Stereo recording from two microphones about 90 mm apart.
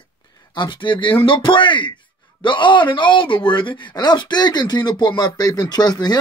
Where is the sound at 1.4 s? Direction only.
65° left (ahead or behind).